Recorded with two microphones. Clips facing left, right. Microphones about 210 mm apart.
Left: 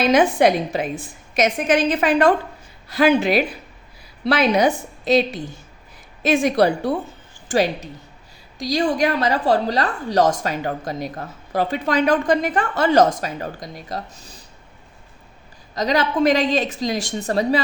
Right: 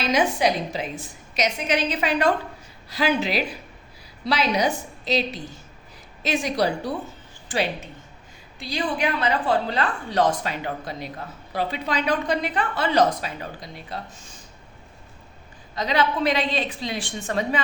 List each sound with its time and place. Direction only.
0.0 s a woman's voice: 55° left (ahead or behind)
7.4 s a woman's voice: 45° left (ahead or behind)
15.7 s a woman's voice: 40° left (ahead or behind)